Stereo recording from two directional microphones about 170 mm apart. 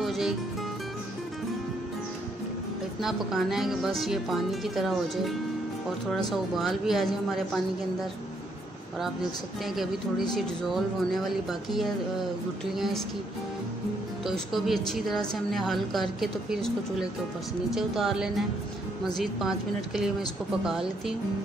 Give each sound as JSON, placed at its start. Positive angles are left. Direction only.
{"t": 0.0, "sound": "music", "side_deg": 0}
{"t": 3.0, "sound": "a woman's voice", "side_deg": 0}
{"t": 10.3, "sound": "a woman's voice", "side_deg": 0}
{"t": 14.2, "sound": "a woman's voice", "side_deg": 0}